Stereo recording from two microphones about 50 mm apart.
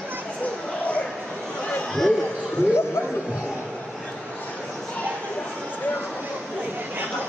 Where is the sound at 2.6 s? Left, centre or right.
Left.